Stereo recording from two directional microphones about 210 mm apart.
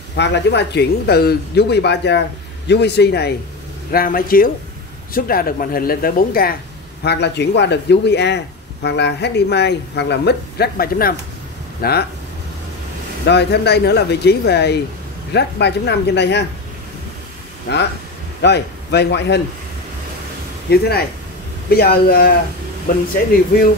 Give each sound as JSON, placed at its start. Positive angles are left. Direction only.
{"t": 0.1, "sound": "speech", "side_deg": 55}
{"t": 7.1, "sound": "speech", "side_deg": 55}
{"t": 13.3, "sound": "speech", "side_deg": 55}
{"t": 17.7, "sound": "speech", "side_deg": 55}
{"t": 20.7, "sound": "speech", "side_deg": 50}